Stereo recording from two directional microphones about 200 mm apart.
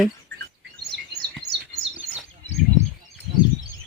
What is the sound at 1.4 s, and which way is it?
Chirp, 60° right (ahead or behind).